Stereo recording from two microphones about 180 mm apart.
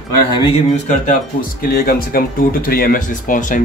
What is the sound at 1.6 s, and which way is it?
Speech, 55° left (ahead or behind).